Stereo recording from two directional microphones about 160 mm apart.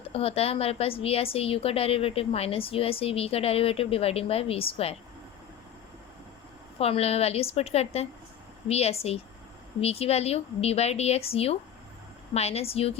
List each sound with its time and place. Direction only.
0.1 s a woman's voice: 35° left (ahead or behind)
6.7 s a woman's voice: 40° left (ahead or behind)